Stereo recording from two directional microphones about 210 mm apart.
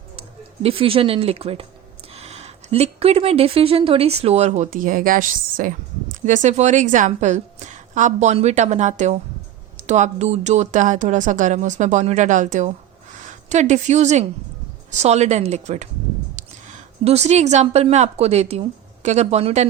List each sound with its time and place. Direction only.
0.2 s a woman's voice: 25° right (ahead or behind)
17.0 s a woman's voice: 30° right (ahead or behind)